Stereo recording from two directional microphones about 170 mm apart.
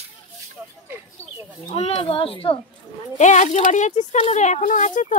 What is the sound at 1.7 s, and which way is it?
Speech, 35° left (ahead or behind).